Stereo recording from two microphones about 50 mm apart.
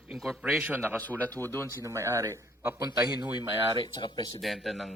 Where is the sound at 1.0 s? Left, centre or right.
Left.